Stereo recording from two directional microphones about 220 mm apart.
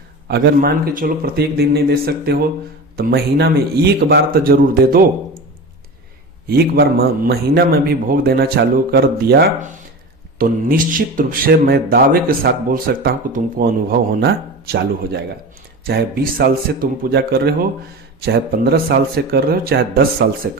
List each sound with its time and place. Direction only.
0.3 s a man's voice: 45° right (ahead or behind)
6.5 s a man's voice: 45° right (ahead or behind)